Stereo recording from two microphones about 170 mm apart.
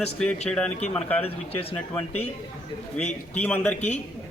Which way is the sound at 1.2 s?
35° left (ahead or behind).